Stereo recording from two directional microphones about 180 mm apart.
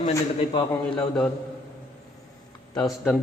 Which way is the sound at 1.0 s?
5° left (ahead or behind).